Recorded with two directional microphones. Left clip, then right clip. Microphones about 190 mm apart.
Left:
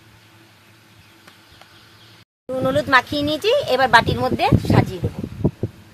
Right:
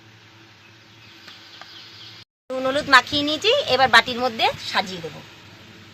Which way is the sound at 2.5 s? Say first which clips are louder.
Even; 35° left (ahead or behind).